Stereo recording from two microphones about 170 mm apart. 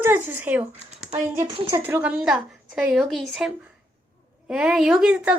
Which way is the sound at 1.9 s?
10° right (ahead or behind).